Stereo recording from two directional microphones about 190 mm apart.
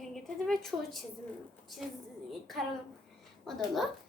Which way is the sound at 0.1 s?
Centre (ahead or behind).